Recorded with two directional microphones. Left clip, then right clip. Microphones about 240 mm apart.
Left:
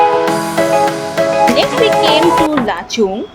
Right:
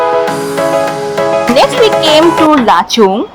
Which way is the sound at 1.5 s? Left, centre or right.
Centre.